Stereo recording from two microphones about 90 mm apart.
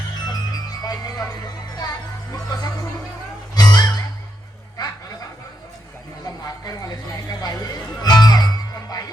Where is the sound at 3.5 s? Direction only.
50° left (ahead or behind).